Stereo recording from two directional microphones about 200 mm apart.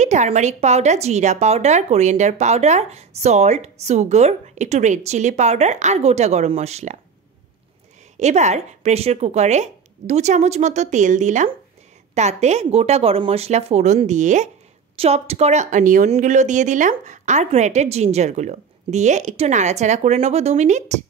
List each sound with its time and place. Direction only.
0.0 s a woman's voice: 35° right (ahead or behind)
8.2 s a woman's voice: 35° right (ahead or behind)